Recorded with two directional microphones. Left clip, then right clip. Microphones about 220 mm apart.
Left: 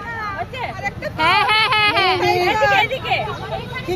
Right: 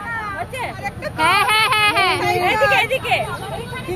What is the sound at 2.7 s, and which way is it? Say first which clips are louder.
Speech: even; 30° right (ahead or behind).